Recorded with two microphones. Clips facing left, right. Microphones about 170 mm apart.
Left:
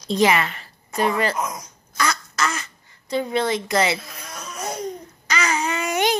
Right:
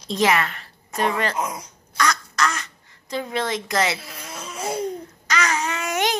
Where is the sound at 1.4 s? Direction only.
30° right (ahead or behind).